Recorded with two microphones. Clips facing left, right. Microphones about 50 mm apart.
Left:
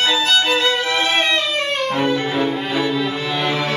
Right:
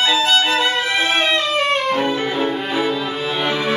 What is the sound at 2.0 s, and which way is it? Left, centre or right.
Brass instrument, centre.